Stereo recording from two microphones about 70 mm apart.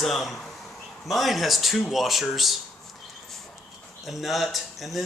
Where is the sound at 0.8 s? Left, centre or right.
Centre.